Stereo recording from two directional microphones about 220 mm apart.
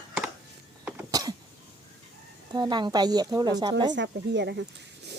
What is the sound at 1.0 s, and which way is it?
Cough, 15° right (ahead or behind).